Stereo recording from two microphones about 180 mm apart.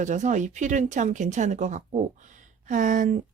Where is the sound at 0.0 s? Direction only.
40° right (ahead or behind).